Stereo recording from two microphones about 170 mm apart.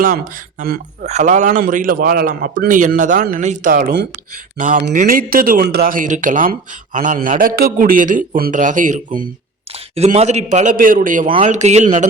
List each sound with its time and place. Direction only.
1.0 s speech: 45° right (ahead or behind)